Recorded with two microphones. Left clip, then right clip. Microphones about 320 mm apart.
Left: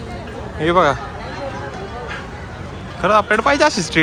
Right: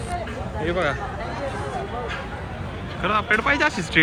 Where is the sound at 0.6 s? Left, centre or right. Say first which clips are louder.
Left 10 dB; centre.